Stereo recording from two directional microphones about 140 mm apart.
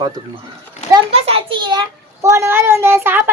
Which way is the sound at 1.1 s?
45° right (ahead or behind).